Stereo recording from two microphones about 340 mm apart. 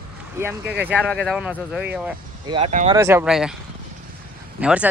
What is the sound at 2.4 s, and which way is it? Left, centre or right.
Speech, centre.